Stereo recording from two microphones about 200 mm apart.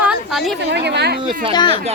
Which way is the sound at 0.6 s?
55° right (ahead or behind).